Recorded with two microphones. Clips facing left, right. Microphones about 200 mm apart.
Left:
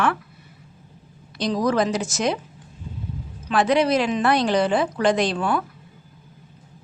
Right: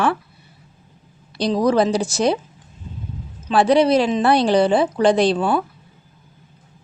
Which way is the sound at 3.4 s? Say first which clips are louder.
Right 4 dB; 30° right (ahead or behind).